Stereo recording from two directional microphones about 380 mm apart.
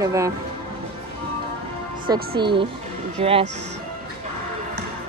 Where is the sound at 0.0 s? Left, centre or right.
Centre.